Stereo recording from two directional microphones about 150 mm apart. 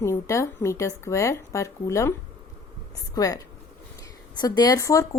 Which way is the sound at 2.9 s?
25° left (ahead or behind).